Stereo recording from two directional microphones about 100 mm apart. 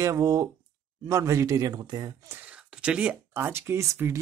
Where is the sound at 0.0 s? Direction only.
35° right (ahead or behind).